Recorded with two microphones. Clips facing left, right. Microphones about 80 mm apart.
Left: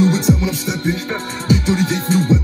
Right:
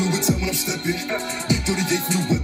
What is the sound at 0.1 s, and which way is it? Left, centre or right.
Music, left.